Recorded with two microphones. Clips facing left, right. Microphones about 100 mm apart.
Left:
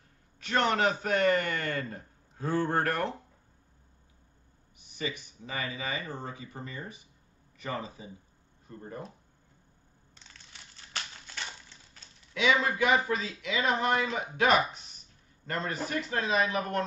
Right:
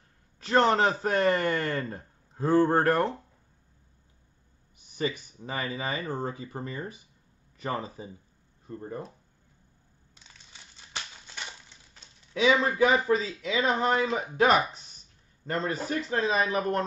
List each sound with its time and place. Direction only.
0.4 s a man's voice: 35° right (ahead or behind)
4.9 s a man's voice: 40° right (ahead or behind)
10.9 s crumpling: 20° right (ahead or behind)
12.4 s a man's voice: 35° right (ahead or behind)